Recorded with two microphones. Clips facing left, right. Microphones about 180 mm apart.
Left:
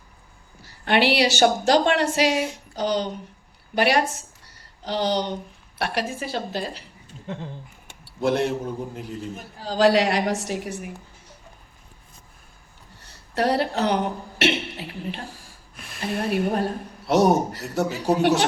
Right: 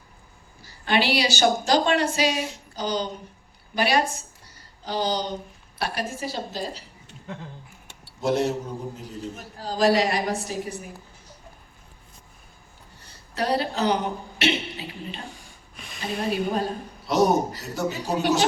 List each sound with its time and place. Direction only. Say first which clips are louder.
0.6 s a woman's voice: left 3 dB; 65° left (ahead or behind)
8.2 s a woman's voice: left 1 dB; 60° left (ahead or behind)
9.6 s a woman's voice: left 2 dB; 70° left (ahead or behind)
13.0 s speech: left 4 dB; 65° left (ahead or behind)
15.3 s a sound: even; 5° left (ahead or behind)
16.1 s a woman's voice: left 2 dB; 65° left (ahead or behind)